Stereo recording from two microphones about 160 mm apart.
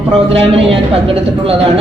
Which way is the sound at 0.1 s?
35° right (ahead or behind).